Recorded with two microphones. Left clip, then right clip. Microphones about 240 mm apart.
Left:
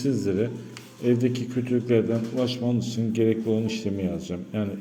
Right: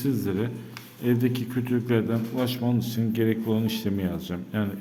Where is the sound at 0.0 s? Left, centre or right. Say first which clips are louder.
Left 3 dB; centre.